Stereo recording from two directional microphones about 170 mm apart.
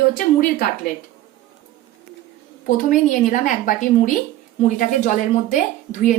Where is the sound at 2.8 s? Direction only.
50° left (ahead or behind).